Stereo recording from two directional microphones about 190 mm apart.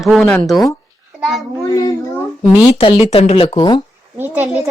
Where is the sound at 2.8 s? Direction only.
30° left (ahead or behind).